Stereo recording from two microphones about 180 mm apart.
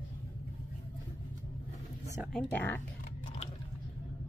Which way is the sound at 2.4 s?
10° left (ahead or behind).